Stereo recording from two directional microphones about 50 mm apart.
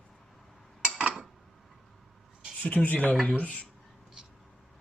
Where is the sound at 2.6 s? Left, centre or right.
Left.